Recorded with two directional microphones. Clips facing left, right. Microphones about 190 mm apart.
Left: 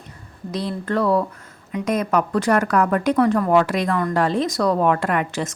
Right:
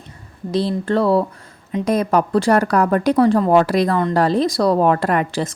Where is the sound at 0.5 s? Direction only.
30° right (ahead or behind).